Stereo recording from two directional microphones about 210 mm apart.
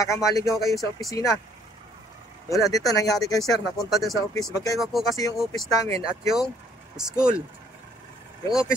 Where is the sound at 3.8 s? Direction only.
Centre (ahead or behind).